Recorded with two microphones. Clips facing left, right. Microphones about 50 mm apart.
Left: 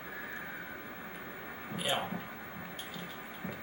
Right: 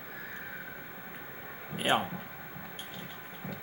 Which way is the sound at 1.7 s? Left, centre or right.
Right.